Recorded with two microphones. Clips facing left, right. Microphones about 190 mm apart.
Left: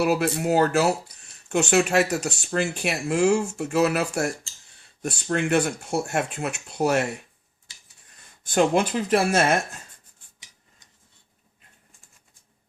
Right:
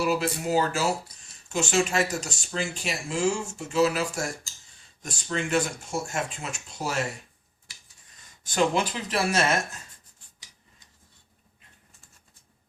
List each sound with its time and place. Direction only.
0.0 s speech: 60° left (ahead or behind)
8.1 s speech: 55° left (ahead or behind)